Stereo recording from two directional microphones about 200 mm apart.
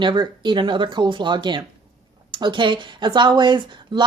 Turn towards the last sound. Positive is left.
turn(degrees=-25)  # may be behind; listen again after turning